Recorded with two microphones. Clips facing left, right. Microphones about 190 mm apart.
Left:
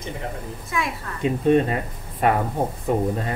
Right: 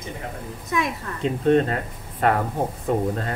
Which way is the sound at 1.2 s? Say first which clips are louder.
Left 1 dB; 10° left (ahead or behind).